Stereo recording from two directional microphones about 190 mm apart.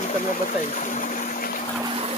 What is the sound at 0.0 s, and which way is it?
Pump, 40° left (ahead or behind).